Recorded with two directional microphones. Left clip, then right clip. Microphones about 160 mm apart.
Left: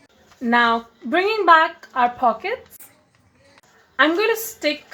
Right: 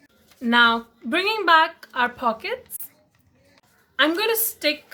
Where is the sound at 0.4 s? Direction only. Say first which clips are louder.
Even; 10° right (ahead or behind).